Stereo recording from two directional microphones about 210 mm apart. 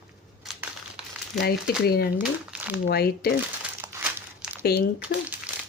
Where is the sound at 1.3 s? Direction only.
50° left (ahead or behind).